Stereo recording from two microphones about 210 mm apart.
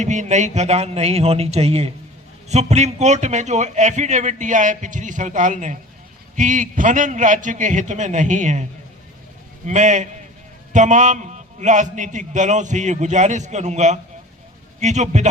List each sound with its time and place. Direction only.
0.0 s a man's voice: 35° right (ahead or behind)
9.6 s a man's voice: 35° right (ahead or behind)